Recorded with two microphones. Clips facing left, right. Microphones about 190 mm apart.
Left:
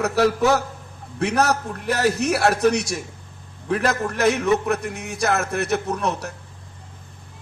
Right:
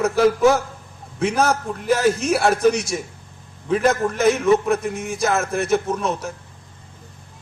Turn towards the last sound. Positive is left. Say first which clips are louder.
# right 1 dB
turn(degrees=65)  # may be behind; listen again after turning